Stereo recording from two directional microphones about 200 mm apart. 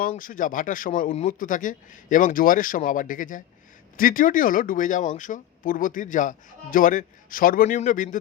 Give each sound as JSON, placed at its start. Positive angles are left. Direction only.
{"t": 0.0, "sound": "speech", "side_deg": 45}